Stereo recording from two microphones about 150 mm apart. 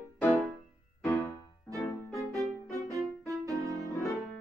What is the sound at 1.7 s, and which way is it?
Music, 20° right (ahead or behind).